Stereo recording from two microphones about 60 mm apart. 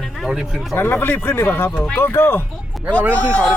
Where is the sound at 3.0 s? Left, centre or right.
Right.